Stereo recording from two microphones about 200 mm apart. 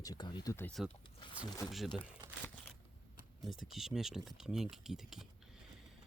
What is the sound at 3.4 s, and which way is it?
Speech, centre (ahead or behind).